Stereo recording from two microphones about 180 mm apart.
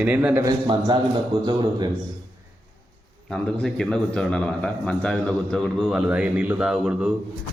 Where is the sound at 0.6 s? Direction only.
25° right (ahead or behind).